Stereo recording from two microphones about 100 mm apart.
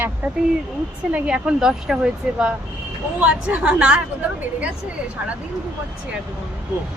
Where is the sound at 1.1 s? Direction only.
10° right (ahead or behind).